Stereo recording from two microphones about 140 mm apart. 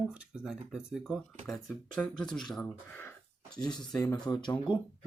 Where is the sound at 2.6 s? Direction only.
15° left (ahead or behind).